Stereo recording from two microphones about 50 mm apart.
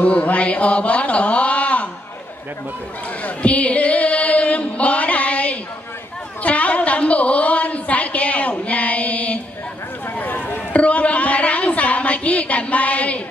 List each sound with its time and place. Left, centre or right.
0.0 s mantra: left
3.3 s music: left
6.4 s a sound: left